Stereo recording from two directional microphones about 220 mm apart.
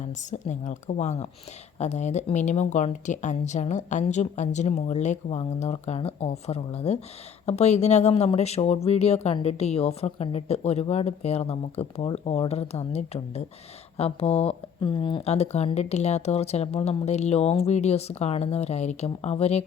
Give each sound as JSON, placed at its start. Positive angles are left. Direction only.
{"t": 0.3, "sound": "speech", "side_deg": 35}